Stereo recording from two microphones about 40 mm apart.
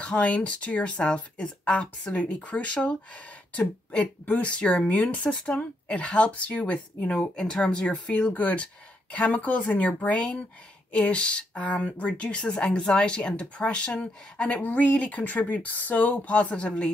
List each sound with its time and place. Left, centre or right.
0.0 s speech: left
7.2 s speech: centre
7.9 s speech: left
10.1 s speech: left
14.6 s speech: left